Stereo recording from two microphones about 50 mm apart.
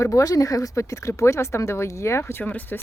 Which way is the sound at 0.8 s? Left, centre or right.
Left.